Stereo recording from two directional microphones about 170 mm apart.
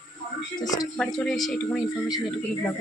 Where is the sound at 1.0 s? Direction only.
Centre (ahead or behind).